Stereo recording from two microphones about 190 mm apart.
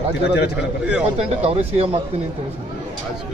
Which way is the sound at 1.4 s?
35° right (ahead or behind).